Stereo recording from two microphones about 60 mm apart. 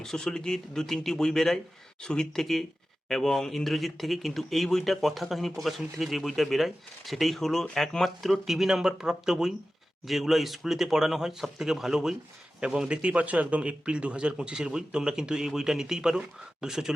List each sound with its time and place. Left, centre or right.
0.0 s a man's voice: centre